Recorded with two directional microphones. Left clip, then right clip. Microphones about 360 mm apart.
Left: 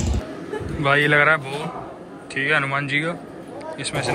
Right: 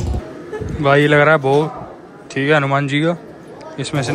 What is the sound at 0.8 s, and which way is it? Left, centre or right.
A man's voice, centre.